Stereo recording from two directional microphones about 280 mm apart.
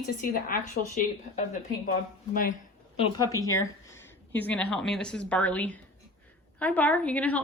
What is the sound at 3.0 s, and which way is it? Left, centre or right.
A woman's voice, centre.